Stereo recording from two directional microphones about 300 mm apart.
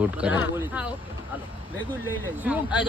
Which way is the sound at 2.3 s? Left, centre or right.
Centre.